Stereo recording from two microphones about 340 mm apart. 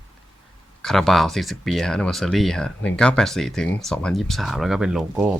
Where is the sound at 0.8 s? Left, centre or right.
Centre.